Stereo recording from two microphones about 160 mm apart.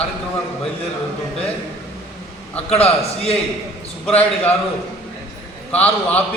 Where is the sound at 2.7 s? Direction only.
40° left (ahead or behind).